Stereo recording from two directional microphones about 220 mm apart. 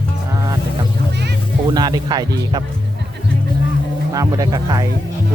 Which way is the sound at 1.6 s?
20° right (ahead or behind).